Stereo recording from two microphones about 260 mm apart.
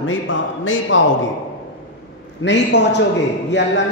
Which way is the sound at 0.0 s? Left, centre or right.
Left.